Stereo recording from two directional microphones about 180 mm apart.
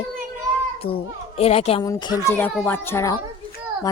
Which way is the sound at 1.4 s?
35° left (ahead or behind).